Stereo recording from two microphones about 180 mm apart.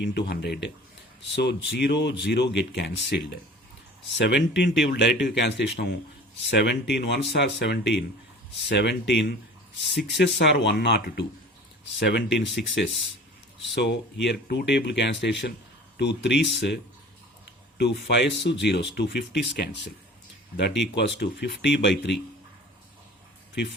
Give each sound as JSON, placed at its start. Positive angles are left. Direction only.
{"t": 0.0, "sound": "speech", "side_deg": 70}
{"t": 4.2, "sound": "speech", "side_deg": 75}
{"t": 10.2, "sound": "speech", "side_deg": 85}
{"t": 13.6, "sound": "speech", "side_deg": 70}